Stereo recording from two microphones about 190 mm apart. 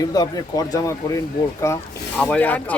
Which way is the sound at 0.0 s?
20° left (ahead or behind).